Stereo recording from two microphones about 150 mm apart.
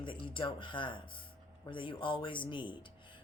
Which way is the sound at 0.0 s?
35° left (ahead or behind).